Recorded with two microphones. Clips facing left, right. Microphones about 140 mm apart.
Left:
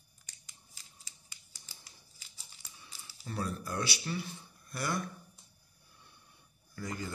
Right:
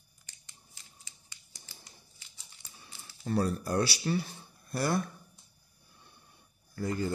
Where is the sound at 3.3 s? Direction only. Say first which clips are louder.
Right 8 dB; 35° right (ahead or behind).